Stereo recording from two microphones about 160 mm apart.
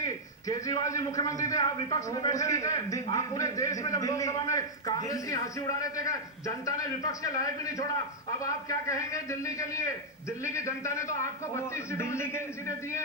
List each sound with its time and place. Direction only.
0.0 s a man's voice: 20° left (ahead or behind)